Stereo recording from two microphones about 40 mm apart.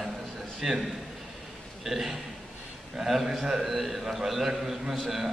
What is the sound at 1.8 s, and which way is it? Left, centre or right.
A man's voice, centre.